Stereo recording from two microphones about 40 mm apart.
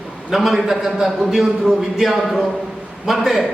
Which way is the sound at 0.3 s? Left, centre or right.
Centre.